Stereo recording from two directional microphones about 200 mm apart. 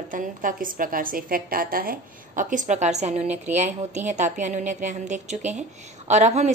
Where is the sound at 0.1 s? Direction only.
45° right (ahead or behind).